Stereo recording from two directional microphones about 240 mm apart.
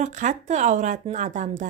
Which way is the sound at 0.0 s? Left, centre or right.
Right.